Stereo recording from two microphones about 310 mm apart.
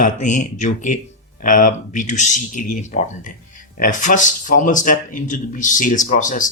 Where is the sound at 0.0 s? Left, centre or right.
Left.